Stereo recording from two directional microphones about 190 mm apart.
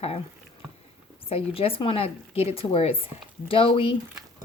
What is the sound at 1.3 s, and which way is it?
Speech, 30° left (ahead or behind).